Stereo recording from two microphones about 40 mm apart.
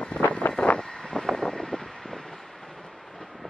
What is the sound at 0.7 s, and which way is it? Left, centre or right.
Vehicle, centre.